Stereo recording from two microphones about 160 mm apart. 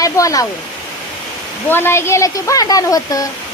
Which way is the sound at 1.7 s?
15° left (ahead or behind).